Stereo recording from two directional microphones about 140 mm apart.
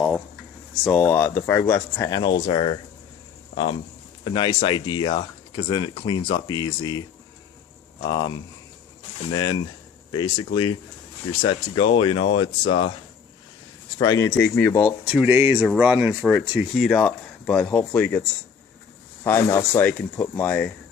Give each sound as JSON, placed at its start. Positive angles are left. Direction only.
{"t": 0.9, "sound": "speech", "side_deg": 15}
{"t": 8.0, "sound": "speech", "side_deg": 35}
{"t": 14.0, "sound": "speech", "side_deg": 25}
{"t": 14.3, "sound": "speech", "side_deg": 15}
{"t": 15.0, "sound": "speech", "side_deg": -10}
{"t": 19.2, "sound": "speech", "side_deg": 20}